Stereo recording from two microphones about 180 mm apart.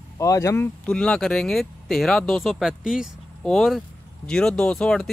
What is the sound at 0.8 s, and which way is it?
Speech, 5° left (ahead or behind).